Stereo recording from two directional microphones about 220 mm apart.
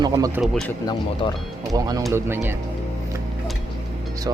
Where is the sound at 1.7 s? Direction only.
15° right (ahead or behind).